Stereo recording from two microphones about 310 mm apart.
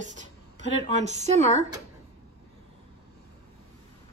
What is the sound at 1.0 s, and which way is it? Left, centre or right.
Speech, right.